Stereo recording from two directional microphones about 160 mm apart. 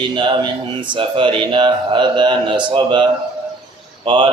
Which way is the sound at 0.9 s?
30° right (ahead or behind).